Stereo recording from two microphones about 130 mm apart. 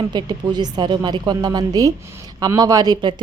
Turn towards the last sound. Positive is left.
turn(degrees=-35)  # may be behind; listen again after turning